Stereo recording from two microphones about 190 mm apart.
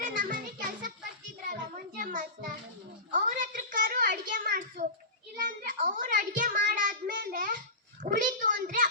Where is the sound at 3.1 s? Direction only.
40° right (ahead or behind).